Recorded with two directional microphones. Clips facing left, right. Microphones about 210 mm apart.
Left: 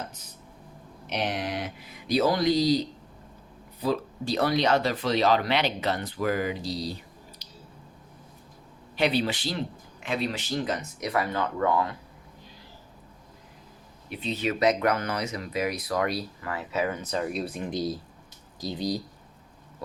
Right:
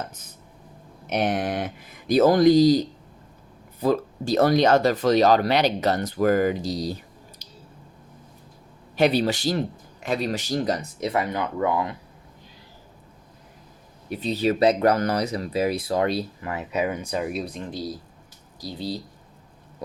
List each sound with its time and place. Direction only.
1.0 s speech: 50° right (ahead or behind)
9.0 s speech: 45° right (ahead or behind); by 11.9 s 15° right (ahead or behind)
14.1 s speech: 40° right (ahead or behind); by 17.4 s 10° right (ahead or behind)
17.4 s speech: 10° left (ahead or behind)